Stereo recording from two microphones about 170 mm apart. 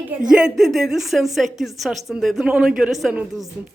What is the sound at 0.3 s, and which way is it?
A woman's voice, 5° right (ahead or behind).